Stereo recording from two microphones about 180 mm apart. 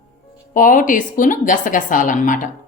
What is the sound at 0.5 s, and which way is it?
Speech, 50° left (ahead or behind).